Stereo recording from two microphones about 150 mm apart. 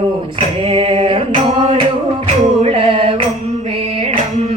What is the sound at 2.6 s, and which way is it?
Music, 40° right (ahead or behind).